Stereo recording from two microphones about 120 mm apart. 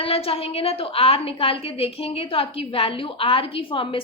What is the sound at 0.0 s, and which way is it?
A woman's voice, 55° left (ahead or behind).